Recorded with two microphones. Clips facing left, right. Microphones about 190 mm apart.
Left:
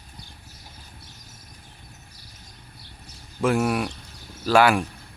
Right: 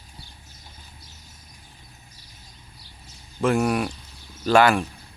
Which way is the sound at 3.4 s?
5° left (ahead or behind).